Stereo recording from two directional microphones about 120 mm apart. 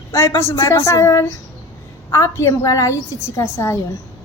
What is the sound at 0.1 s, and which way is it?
A woman's voice, 25° left (ahead or behind).